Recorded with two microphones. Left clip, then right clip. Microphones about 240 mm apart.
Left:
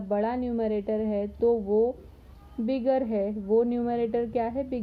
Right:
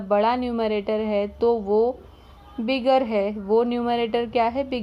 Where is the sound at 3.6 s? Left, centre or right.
Right.